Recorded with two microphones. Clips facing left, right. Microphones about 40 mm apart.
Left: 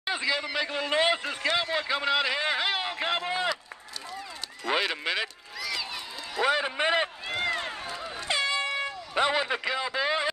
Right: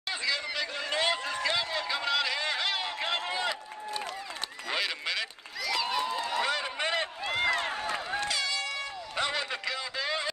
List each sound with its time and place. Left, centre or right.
0.0 s a man's voice: centre
1.3 s a man's voice: left
4.6 s speech: centre
5.6 s a sound: centre
6.4 s a man's voice: centre
7.2 s run: centre
8.3 s air horn: left